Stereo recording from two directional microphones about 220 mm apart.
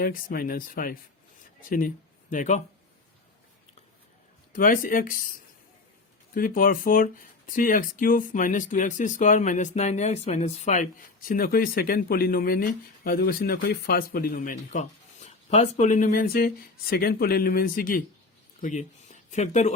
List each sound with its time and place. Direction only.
0.0 s speech: 40° left (ahead or behind)
2.3 s speech: 35° left (ahead or behind)
4.5 s speech: 40° left (ahead or behind)
6.3 s speech: 40° left (ahead or behind)